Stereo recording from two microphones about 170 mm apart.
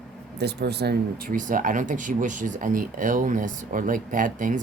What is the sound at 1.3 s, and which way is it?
Speech, 50° right (ahead or behind).